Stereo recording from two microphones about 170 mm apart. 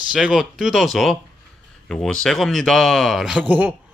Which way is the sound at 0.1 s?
5° right (ahead or behind).